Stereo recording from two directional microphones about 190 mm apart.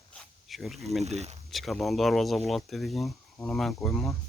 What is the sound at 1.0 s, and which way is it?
Speech, 35° right (ahead or behind).